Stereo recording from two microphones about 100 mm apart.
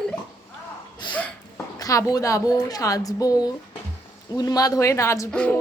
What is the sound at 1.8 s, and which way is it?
Speech, 35° left (ahead or behind).